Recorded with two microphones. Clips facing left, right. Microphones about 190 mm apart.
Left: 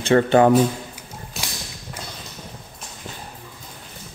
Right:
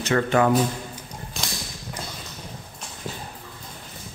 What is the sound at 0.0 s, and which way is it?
Speech, 30° left (ahead or behind).